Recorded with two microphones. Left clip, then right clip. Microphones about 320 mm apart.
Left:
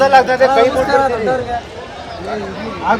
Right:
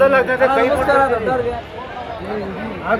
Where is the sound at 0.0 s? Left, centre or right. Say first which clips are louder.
Left 4 dB; left.